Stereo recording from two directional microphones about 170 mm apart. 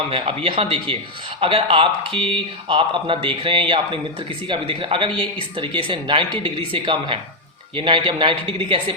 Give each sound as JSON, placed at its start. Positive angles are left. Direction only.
{"t": 0.1, "sound": "speech", "side_deg": -35}